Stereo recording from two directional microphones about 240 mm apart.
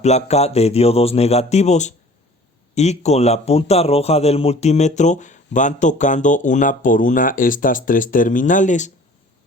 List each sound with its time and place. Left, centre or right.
0.0 s speech: left